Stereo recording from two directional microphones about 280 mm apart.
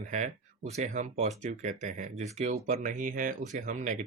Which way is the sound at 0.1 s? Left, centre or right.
Right.